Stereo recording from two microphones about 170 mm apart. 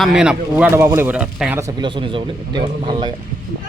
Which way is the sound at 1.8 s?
30° right (ahead or behind).